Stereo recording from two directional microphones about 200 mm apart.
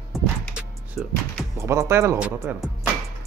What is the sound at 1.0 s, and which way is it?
Speech, centre (ahead or behind).